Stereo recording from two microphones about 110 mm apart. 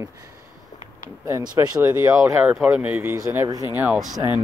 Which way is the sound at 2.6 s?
15° right (ahead or behind).